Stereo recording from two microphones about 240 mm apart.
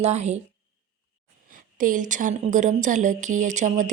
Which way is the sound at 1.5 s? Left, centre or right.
Right.